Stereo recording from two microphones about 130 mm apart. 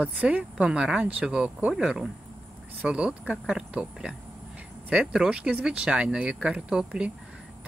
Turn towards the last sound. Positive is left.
turn(degrees=-5)  # may be behind; listen again after turning